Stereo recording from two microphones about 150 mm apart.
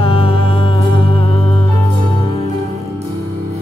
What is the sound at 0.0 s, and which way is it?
Music, 40° left (ahead or behind).